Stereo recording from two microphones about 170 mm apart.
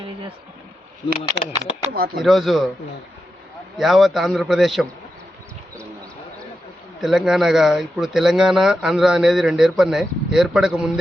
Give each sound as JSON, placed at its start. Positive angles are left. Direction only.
{"t": 1.9, "sound": "speech", "side_deg": -65}
{"t": 2.2, "sound": "speech", "side_deg": 0}
{"t": 3.8, "sound": "speech", "side_deg": 0}
{"t": 7.0, "sound": "speech", "side_deg": 0}